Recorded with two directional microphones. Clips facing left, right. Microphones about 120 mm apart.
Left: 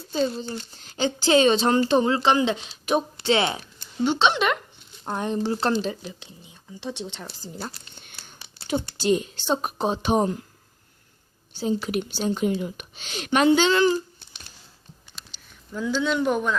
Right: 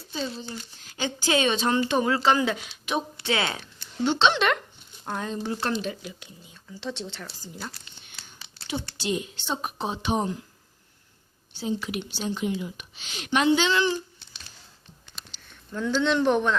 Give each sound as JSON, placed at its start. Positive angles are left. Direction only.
{"t": 0.1, "sound": "speech", "side_deg": 45}
{"t": 0.8, "sound": "speech", "side_deg": 30}
{"t": 2.8, "sound": "a woman's voice", "side_deg": 40}
{"t": 3.2, "sound": "speech", "side_deg": 25}
{"t": 3.6, "sound": "speech", "side_deg": 10}
{"t": 5.0, "sound": "speech", "side_deg": 20}
{"t": 7.6, "sound": "speech", "side_deg": 40}
{"t": 11.5, "sound": "speech", "side_deg": 40}
{"t": 15.3, "sound": "speech", "side_deg": 5}